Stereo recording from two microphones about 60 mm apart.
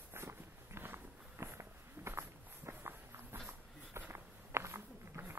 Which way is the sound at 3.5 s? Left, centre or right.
Right.